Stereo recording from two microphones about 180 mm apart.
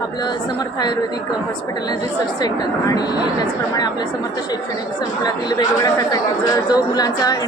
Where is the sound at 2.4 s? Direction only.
20° left (ahead or behind).